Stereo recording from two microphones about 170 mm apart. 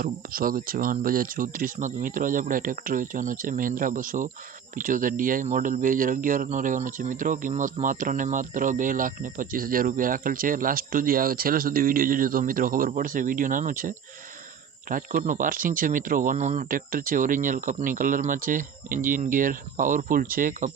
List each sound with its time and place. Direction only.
0.0 s speech: 55° right (ahead or behind)